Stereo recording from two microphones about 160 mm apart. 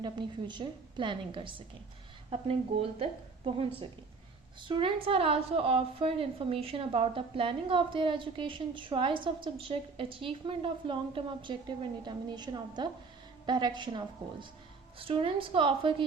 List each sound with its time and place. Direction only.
0.0 s a woman's voice: 30° right (ahead or behind)
3.0 s a woman's voice: 35° right (ahead or behind)